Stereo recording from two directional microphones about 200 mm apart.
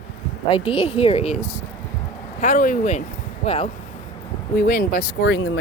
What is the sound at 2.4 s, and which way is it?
Speech, 40° left (ahead or behind).